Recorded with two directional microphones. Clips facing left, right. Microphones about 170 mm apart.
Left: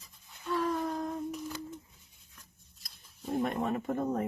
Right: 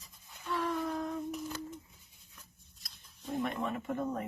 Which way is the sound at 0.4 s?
35° left (ahead or behind).